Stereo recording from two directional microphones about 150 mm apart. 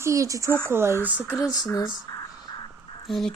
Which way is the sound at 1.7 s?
25° left (ahead or behind).